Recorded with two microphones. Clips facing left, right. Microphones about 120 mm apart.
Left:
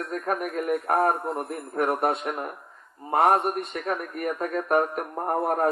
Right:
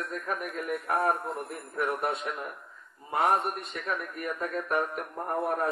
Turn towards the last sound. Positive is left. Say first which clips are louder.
# left 5 dB
turn(degrees=50)  # may be behind; listen again after turning